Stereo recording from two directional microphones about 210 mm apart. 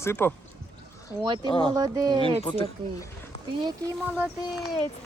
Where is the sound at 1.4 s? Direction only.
25° left (ahead or behind).